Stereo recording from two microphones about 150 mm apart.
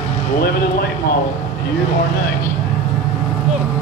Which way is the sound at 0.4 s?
90° left.